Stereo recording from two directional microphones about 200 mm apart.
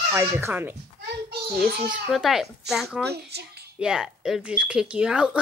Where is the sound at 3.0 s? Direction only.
55° right (ahead or behind).